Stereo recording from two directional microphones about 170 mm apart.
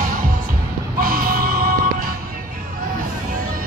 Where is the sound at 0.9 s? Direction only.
60° right (ahead or behind).